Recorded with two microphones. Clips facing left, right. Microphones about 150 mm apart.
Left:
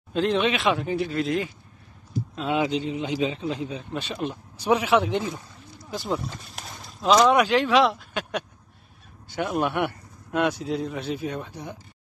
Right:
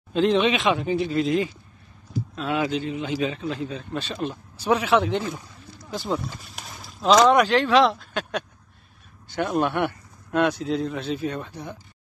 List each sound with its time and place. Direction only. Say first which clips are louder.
0.1 s speech: right 3 dB; centre (ahead or behind)
2.3 s a man's voice: left 1 dB; 20° left (ahead or behind)